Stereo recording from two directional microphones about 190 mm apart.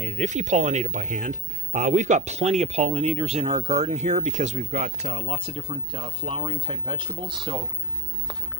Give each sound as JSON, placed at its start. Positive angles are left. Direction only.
{"t": 0.0, "sound": "speech", "side_deg": -40}